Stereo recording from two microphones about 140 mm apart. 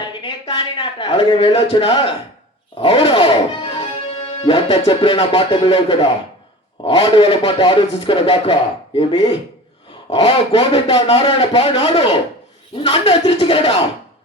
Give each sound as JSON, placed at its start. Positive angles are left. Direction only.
{"t": 0.1, "sound": "a sound", "side_deg": 35}
{"t": 2.8, "sound": "a man's voice", "side_deg": 40}
{"t": 10.2, "sound": "a man's voice", "side_deg": 40}